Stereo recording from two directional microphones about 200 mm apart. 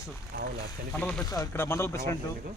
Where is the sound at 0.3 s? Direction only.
50° right (ahead or behind).